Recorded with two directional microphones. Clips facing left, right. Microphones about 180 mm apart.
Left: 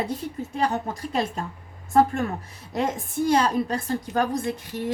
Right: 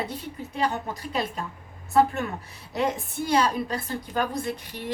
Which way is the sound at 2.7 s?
45° left (ahead or behind).